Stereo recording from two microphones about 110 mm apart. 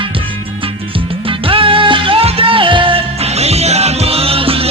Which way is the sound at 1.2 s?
55° right (ahead or behind).